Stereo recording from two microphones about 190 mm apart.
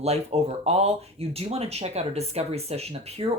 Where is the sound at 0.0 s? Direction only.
35° right (ahead or behind).